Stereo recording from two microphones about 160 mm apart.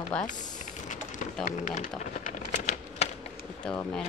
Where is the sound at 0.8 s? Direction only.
50° left (ahead or behind).